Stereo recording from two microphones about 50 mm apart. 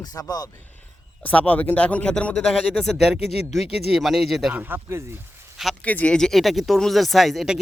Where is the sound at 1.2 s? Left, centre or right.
Left.